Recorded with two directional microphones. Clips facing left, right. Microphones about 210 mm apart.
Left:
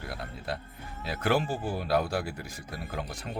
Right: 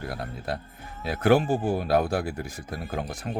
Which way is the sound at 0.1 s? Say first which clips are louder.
Right 4 dB; 45° right (ahead or behind).